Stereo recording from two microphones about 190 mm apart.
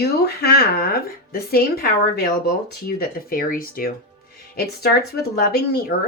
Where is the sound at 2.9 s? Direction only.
50° left (ahead or behind).